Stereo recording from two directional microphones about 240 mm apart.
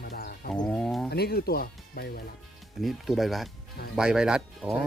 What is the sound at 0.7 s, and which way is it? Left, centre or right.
Speech, centre.